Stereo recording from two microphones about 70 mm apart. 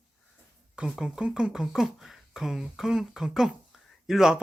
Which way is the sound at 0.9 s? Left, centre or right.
Centre.